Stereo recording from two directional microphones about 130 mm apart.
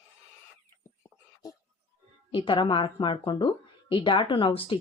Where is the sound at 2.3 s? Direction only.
40° left (ahead or behind).